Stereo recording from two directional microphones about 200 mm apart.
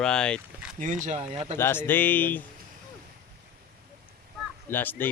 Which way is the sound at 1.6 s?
10° left (ahead or behind).